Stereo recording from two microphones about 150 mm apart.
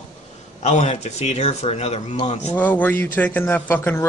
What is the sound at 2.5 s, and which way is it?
A man's voice, 10° left (ahead or behind).